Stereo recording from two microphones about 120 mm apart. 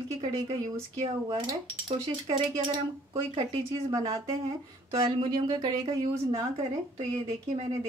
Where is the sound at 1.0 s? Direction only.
45° right (ahead or behind).